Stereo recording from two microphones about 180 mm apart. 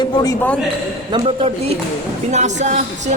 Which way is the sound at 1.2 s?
35° right (ahead or behind).